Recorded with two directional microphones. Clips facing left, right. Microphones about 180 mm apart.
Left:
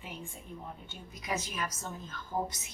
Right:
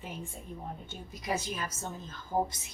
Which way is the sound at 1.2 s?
30° right (ahead or behind).